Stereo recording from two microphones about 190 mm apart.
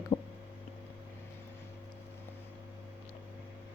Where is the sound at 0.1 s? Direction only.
25° left (ahead or behind).